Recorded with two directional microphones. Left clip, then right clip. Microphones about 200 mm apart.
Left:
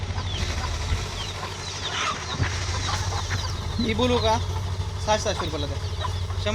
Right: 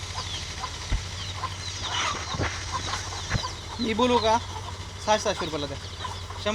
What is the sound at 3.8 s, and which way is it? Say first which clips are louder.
Speech: even; 25° right (ahead or behind).